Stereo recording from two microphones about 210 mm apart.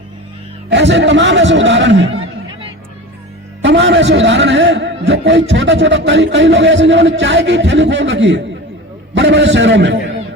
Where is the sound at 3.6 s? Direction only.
60° right (ahead or behind).